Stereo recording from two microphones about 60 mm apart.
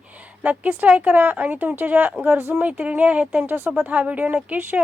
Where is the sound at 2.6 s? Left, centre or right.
Right.